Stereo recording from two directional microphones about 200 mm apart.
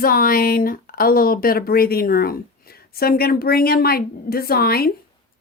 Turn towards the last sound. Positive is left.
turn(degrees=50)  # may be behind; listen again after turning